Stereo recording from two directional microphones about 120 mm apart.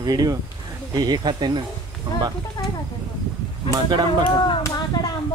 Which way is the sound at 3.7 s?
35° right (ahead or behind).